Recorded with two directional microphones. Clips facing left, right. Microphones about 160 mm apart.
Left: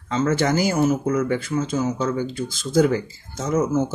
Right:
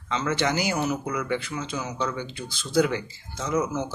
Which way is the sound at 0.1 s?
45° left (ahead or behind).